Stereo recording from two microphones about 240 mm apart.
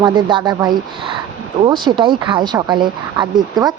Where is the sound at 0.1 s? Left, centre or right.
Centre.